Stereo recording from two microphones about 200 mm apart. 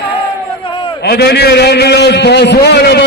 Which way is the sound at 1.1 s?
55° left (ahead or behind).